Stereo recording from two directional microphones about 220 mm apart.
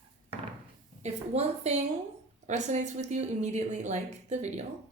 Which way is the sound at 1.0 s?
30° right (ahead or behind).